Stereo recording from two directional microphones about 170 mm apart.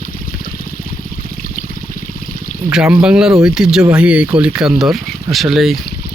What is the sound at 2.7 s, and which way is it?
Speech, 5° right (ahead or behind).